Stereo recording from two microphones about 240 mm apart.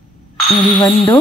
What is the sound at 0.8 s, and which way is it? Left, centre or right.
Speech, centre.